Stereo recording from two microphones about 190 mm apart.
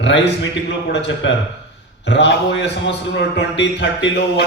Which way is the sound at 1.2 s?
70° left (ahead or behind).